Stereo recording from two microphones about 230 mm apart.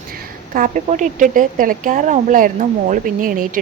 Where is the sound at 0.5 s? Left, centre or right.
Right.